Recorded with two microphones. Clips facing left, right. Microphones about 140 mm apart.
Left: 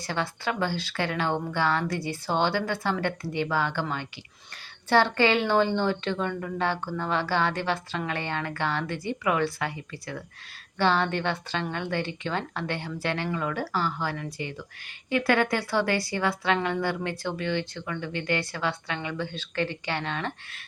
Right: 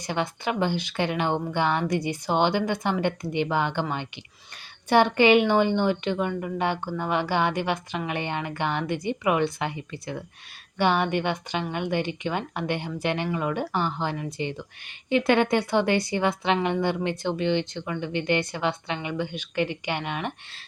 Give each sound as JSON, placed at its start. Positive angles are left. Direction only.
{"t": 0.0, "sound": "a woman's voice", "side_deg": -20}